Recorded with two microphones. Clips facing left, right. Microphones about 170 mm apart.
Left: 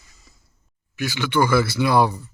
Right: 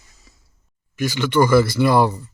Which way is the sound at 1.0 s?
10° left (ahead or behind).